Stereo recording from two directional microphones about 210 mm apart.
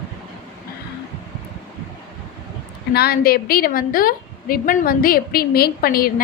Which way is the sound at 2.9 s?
45° left (ahead or behind).